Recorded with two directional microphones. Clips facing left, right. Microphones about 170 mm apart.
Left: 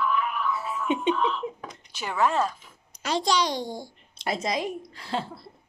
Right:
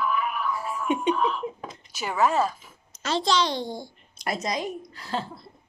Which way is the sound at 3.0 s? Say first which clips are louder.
Right 1 dB; 10° left (ahead or behind).